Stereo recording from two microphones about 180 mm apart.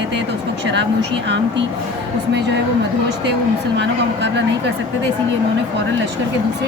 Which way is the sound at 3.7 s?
75° right (ahead or behind).